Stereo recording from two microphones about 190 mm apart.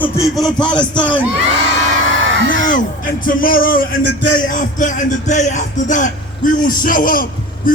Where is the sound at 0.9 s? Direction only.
25° left (ahead or behind).